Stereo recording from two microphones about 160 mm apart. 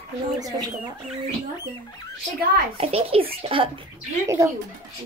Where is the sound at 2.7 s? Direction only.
35° right (ahead or behind).